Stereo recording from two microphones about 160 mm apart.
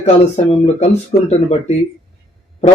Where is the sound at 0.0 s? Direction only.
45° left (ahead or behind).